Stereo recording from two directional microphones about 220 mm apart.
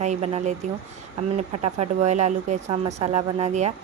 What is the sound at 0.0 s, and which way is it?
A woman's voice, 30° right (ahead or behind).